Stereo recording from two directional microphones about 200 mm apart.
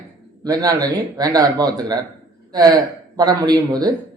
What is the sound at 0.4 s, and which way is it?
A man's voice, 20° right (ahead or behind).